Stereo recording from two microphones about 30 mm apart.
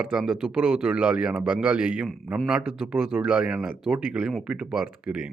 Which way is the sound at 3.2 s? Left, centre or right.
Right.